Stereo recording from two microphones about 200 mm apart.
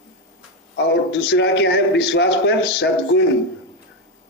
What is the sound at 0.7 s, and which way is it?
Speech, 60° left (ahead or behind).